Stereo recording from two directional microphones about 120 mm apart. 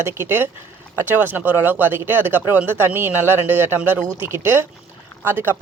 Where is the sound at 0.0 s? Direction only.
20° right (ahead or behind).